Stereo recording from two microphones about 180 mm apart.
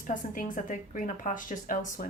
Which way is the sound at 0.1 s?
50° left (ahead or behind).